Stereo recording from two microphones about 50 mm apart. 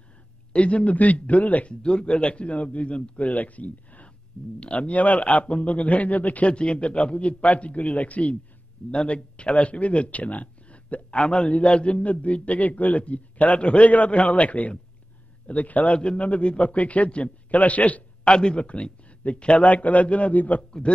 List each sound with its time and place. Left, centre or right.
0.5 s speech: left
1.7 s speech: centre